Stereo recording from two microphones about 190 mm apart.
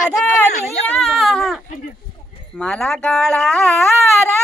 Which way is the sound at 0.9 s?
Centre (ahead or behind).